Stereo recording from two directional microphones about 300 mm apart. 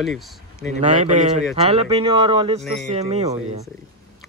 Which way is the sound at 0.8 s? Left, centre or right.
Right.